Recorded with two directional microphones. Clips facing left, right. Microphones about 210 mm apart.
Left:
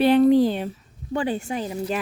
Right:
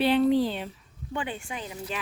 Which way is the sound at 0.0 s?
45° left (ahead or behind).